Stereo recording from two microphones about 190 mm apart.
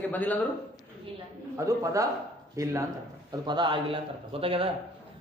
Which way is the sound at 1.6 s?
15° right (ahead or behind).